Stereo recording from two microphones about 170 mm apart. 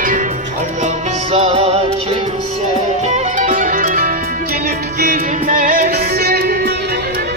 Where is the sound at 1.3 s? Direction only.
40° right (ahead or behind).